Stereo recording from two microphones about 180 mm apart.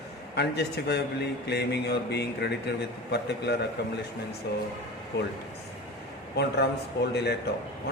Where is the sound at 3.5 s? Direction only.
65° left (ahead or behind).